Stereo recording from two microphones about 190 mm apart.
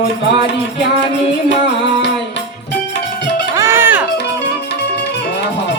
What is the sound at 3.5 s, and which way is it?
Music, 15° right (ahead or behind).